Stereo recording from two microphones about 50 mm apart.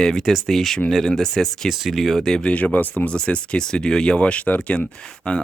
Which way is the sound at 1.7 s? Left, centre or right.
Centre.